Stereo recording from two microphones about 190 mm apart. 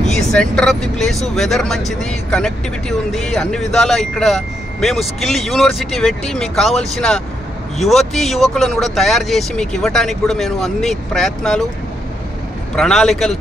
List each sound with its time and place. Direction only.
0.3 s speech: 5° left (ahead or behind)
12.7 s speech: 5° left (ahead or behind)